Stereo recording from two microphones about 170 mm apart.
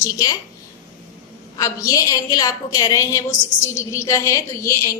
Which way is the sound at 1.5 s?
20° left (ahead or behind).